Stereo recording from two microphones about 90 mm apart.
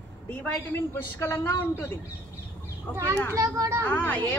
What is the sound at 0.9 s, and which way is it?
A woman's voice, 30° left (ahead or behind).